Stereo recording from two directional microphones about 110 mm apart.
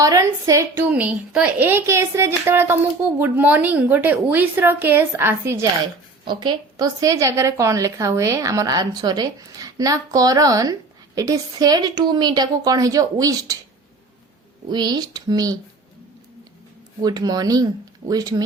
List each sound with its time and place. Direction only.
0.0 s a woman's voice: 30° right (ahead or behind)
0.8 s a woman's voice: 15° right (ahead or behind)
6.2 s a woman's voice: 40° right (ahead or behind)
14.7 s a woman's voice: 40° right (ahead or behind)
17.0 s a woman's voice: 35° right (ahead or behind)